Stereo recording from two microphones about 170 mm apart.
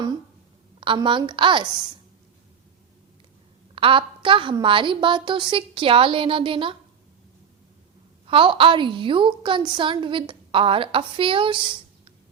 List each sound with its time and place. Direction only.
0.8 s a woman's voice: 30° right (ahead or behind)
3.8 s a woman's voice: 30° right (ahead or behind)
8.3 s a woman's voice: 30° right (ahead or behind)